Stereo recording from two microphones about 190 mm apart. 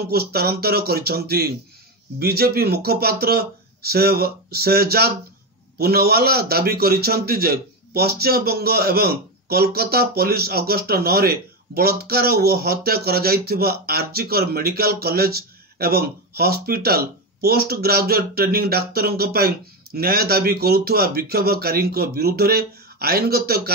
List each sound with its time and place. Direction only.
0.0 s a man's voice: 55° right (ahead or behind)